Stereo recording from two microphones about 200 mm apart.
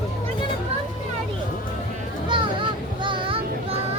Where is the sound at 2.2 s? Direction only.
25° right (ahead or behind).